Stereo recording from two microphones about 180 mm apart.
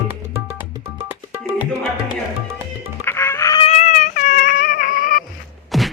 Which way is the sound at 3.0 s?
15° left (ahead or behind).